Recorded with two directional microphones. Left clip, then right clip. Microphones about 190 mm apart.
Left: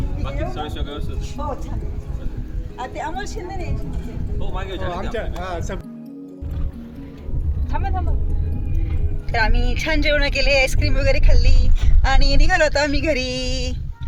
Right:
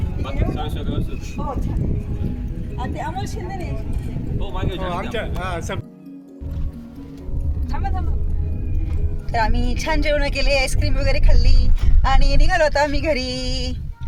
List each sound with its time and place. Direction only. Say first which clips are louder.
0.3 s speech: even; centre (ahead or behind)
2.7 s a woman's voice: left 1 dB; 10° right (ahead or behind)
4.4 s speech: right 1 dB; 5° left (ahead or behind)
4.9 s speech: right 1 dB; 20° right (ahead or behind)
9.3 s speech: even; centre (ahead or behind)